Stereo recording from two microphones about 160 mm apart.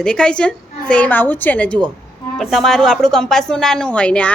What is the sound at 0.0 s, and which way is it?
A woman's voice, 5° left (ahead or behind).